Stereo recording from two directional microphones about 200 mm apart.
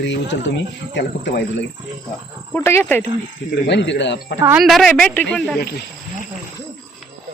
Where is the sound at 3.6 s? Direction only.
60° left (ahead or behind).